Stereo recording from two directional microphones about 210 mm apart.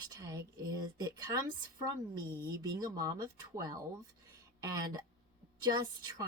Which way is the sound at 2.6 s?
15° right (ahead or behind).